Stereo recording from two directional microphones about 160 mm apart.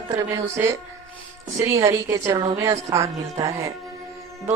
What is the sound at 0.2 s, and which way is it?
A woman's voice, 20° right (ahead or behind).